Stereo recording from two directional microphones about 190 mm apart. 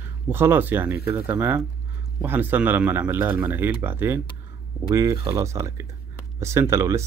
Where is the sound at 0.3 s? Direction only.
10° right (ahead or behind).